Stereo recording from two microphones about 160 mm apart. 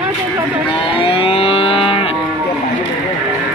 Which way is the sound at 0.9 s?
35° left (ahead or behind).